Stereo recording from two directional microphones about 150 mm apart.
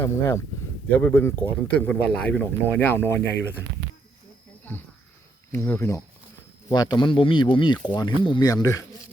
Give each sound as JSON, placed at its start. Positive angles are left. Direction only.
{"t": 0.0, "sound": "speech", "side_deg": 15}
{"t": 4.7, "sound": "speech", "side_deg": 10}
{"t": 6.7, "sound": "speech", "side_deg": 30}